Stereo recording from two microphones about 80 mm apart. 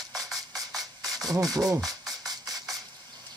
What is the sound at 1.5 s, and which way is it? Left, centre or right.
Speech, right.